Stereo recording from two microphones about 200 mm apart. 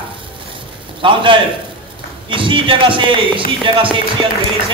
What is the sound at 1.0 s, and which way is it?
Speech, 25° right (ahead or behind).